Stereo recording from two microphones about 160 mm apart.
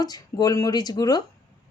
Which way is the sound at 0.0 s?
25° left (ahead or behind).